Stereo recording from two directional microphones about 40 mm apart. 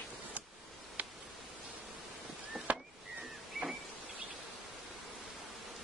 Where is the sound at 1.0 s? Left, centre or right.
Right.